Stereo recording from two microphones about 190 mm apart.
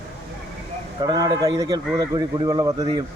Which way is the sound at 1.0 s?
20° right (ahead or behind).